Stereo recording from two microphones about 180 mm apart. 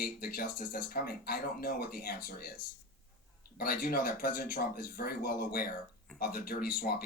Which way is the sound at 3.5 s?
55° left (ahead or behind).